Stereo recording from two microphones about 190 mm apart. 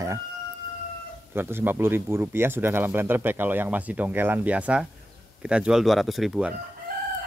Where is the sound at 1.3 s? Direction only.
10° right (ahead or behind).